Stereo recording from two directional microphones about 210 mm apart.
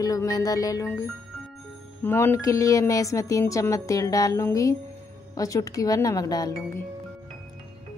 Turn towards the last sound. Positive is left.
turn(degrees=15)  # may be behind; listen again after turning